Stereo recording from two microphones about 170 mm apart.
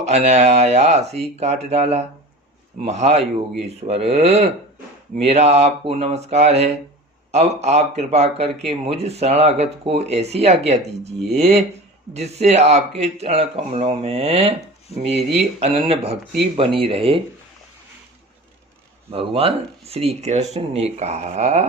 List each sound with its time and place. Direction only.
0.0 s speech: 40° right (ahead or behind)
19.1 s speech: 35° right (ahead or behind)